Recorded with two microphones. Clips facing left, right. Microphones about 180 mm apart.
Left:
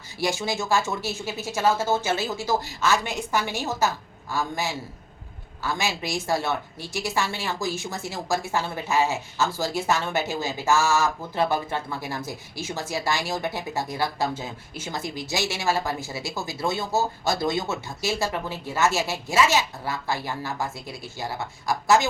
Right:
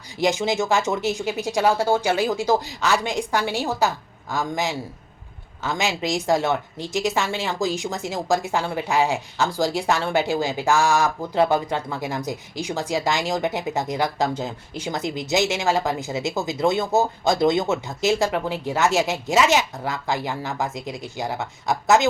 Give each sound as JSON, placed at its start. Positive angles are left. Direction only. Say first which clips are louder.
{"t": 0.2, "sound": "a woman's voice", "louder": "right 5 dB", "side_deg": -20}